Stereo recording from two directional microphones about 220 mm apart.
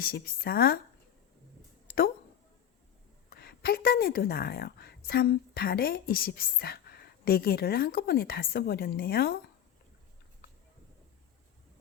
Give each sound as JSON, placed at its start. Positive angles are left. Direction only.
{"t": 0.0, "sound": "a woman's voice", "side_deg": 45}
{"t": 3.2, "sound": "a woman's voice", "side_deg": 45}